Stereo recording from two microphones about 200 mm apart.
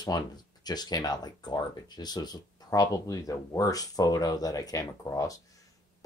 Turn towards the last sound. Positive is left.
turn(degrees=15)  # may be behind; listen again after turning